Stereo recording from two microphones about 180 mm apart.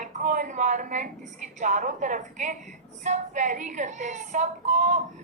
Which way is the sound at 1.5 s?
45° right (ahead or behind).